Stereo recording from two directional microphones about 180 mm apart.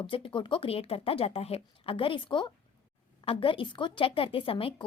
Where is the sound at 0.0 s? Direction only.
30° left (ahead or behind).